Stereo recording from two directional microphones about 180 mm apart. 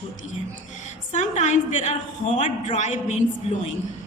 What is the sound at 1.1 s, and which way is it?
A woman's voice, 40° left (ahead or behind).